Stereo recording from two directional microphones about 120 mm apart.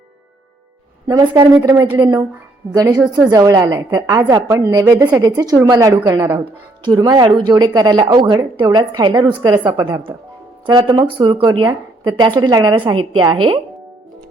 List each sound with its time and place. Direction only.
1.2 s a woman's voice: 40° right (ahead or behind)
1.6 s a woman's voice: 30° right (ahead or behind)
2.0 s a woman's voice: 40° right (ahead or behind)
2.7 s a woman's voice: 30° right (ahead or behind)
6.4 s a woman's voice: 40° right (ahead or behind)